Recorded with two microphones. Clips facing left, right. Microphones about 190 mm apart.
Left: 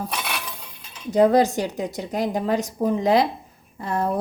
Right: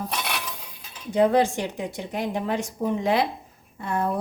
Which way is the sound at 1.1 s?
40° left (ahead or behind).